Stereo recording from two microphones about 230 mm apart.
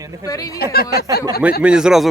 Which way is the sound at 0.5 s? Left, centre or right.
Left.